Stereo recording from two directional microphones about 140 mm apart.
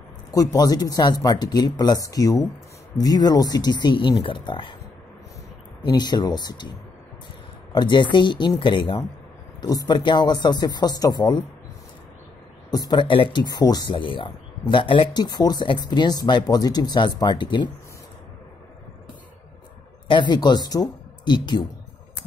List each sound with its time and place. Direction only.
0.3 s speech: 25° left (ahead or behind)
5.8 s speech: 30° left (ahead or behind)
7.7 s speech: 35° left (ahead or behind)
9.6 s speech: 30° left (ahead or behind)
12.7 s speech: 30° left (ahead or behind)
20.1 s speech: 35° left (ahead or behind)